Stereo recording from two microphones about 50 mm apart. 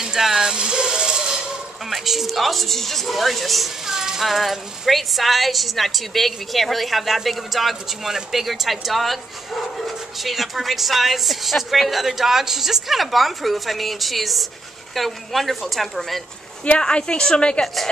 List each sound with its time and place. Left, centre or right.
0.0 s a sound: centre
1.9 s speech: centre
16.6 s a woman's voice: left